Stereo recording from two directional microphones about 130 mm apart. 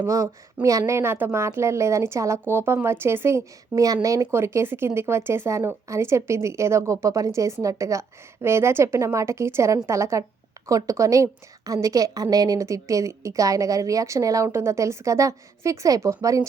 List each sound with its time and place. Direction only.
0.1 s speech: 25° right (ahead or behind)